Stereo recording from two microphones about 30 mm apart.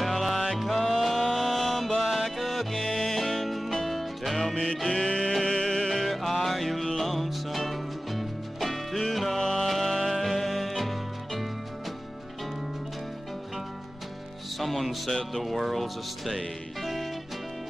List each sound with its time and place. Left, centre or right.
0.0 s music: centre
2.8 s music: centre
3.2 s music: centre
4.9 s music: centre
14.6 s music: centre
15.0 s music: centre
15.4 s speech: centre
16.8 s music: centre